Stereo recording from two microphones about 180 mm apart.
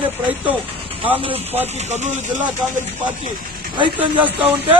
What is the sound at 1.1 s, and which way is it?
Speech, 30° right (ahead or behind).